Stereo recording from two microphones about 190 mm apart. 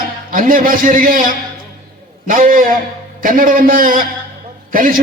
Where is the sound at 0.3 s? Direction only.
45° right (ahead or behind).